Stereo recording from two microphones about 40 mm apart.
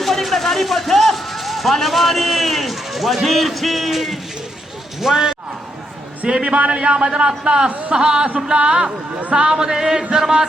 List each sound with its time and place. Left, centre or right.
0.0 s speech: centre
6.2 s speech: right
10.2 s a sound: centre